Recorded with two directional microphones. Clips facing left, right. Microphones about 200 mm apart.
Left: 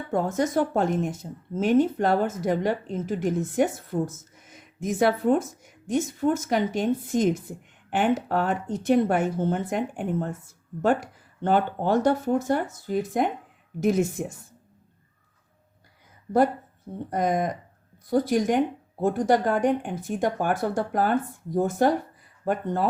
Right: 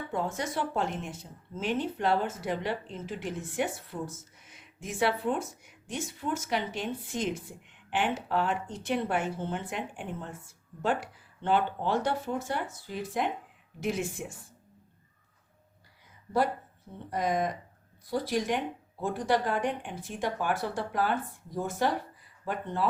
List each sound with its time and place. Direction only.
0.1 s a woman's voice: 45° left (ahead or behind)
17.1 s speech: 45° left (ahead or behind)